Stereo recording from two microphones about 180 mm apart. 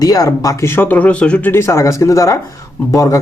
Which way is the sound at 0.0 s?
20° left (ahead or behind).